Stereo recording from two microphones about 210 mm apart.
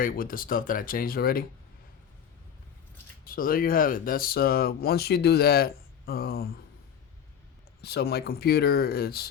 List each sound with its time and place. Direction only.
0.0 s speech: 45° left (ahead or behind)
3.2 s speech: 45° left (ahead or behind)
7.8 s speech: 50° left (ahead or behind)